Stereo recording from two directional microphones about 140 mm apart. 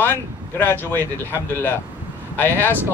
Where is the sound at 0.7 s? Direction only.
15° left (ahead or behind).